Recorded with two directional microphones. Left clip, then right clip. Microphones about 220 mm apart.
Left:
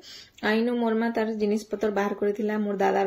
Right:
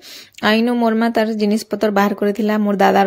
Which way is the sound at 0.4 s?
45° right (ahead or behind).